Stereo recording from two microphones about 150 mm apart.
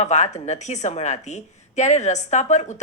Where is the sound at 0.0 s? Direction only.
50° left (ahead or behind).